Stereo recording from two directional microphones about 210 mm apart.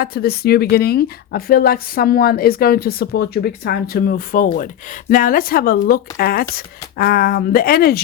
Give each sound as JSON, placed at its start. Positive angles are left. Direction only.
{"t": 0.0, "sound": "a woman's voice", "side_deg": 45}